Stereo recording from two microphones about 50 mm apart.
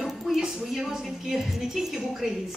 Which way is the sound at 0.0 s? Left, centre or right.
Centre.